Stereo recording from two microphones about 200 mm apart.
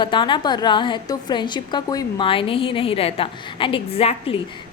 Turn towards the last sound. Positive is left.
turn(degrees=30)  # may be behind; listen again after turning